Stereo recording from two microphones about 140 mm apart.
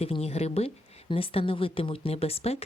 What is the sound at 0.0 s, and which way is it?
Speech, 45° left (ahead or behind).